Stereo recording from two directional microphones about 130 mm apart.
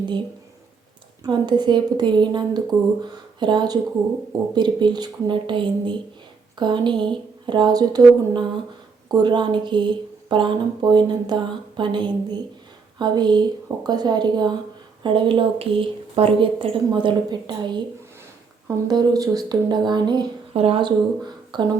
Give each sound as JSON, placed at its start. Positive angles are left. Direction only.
{"t": 1.2, "sound": "speech", "side_deg": -35}
{"t": 18.9, "sound": "speech", "side_deg": -30}
{"t": 20.5, "sound": "speech", "side_deg": -50}